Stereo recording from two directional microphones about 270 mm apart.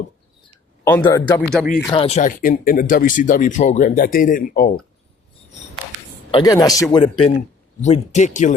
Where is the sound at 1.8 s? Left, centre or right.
Centre.